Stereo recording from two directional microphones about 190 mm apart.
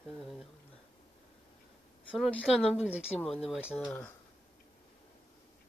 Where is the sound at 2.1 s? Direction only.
Centre (ahead or behind).